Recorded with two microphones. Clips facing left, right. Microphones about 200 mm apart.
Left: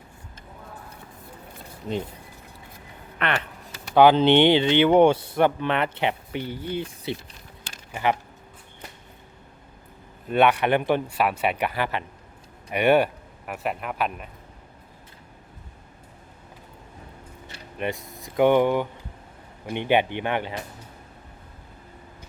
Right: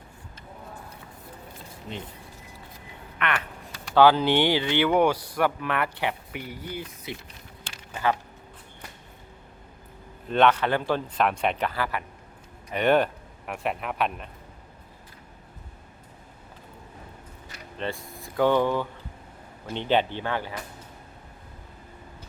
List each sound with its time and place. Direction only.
3.2 s a sound: 35° left (ahead or behind)
3.7 s speech: 20° left (ahead or behind)
10.2 s speech: 10° left (ahead or behind)
11.2 s speech: 5° left (ahead or behind); by 12.0 s 25° left (ahead or behind)
12.7 s speech: 10° left (ahead or behind)
17.7 s speech: 15° left (ahead or behind)